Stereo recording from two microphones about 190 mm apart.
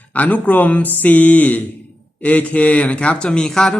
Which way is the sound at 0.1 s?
10° left (ahead or behind).